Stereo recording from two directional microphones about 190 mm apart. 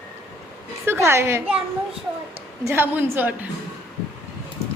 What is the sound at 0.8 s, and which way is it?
Speech, 15° right (ahead or behind).